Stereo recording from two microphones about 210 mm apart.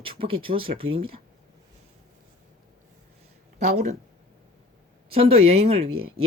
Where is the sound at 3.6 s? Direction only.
35° right (ahead or behind).